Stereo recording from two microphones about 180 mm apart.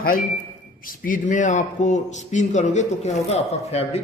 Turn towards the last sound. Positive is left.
turn(degrees=35)  # may be behind; listen again after turning